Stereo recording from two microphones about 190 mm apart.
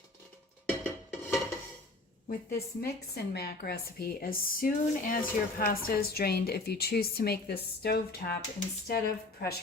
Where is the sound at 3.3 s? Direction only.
55° left (ahead or behind).